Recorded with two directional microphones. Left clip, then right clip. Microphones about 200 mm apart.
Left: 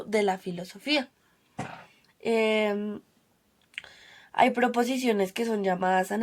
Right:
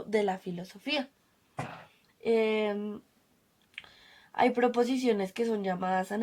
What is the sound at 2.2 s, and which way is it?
Speech, 35° left (ahead or behind).